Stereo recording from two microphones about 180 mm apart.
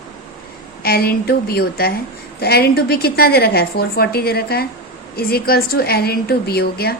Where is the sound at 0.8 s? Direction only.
60° left (ahead or behind).